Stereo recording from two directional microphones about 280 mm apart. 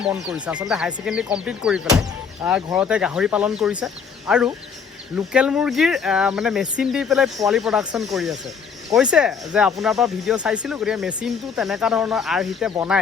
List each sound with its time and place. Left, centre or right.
0.0 s speech: centre